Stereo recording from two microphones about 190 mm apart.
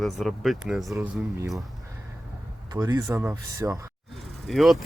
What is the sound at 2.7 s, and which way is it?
Speech, 20° right (ahead or behind).